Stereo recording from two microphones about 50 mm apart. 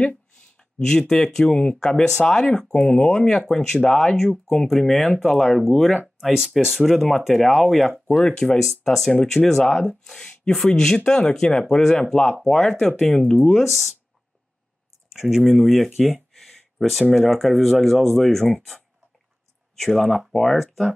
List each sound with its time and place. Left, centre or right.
0.7 s speech: centre
8.2 s speech: centre
13.5 s speech: centre
15.1 s speech: centre